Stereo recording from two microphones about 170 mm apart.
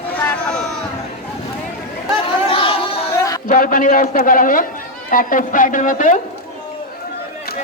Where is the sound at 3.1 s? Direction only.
20° left (ahead or behind).